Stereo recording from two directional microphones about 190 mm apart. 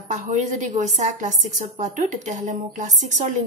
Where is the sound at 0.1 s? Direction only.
40° right (ahead or behind).